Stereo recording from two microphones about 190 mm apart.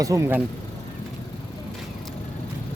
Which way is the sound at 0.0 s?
15° right (ahead or behind).